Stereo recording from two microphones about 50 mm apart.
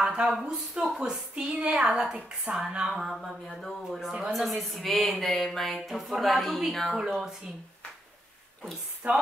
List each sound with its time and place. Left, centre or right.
0.0 s a woman's voice: centre
2.9 s speech: centre
6.9 s a woman's voice: centre
9.0 s speech: right